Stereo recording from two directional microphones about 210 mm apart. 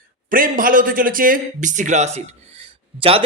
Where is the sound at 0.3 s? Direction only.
40° right (ahead or behind).